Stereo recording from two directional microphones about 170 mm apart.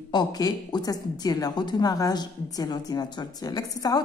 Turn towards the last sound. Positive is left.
turn(degrees=20)  # may be behind; listen again after turning